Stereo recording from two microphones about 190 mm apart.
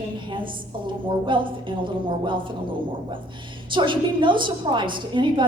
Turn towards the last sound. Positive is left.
turn(degrees=-25)  # may be behind; listen again after turning